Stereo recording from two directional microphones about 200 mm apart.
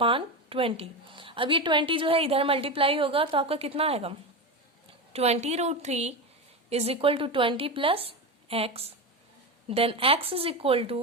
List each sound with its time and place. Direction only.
0.0 s a woman's voice: 25° right (ahead or behind)